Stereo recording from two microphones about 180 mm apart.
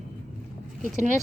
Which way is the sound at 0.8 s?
45° right (ahead or behind).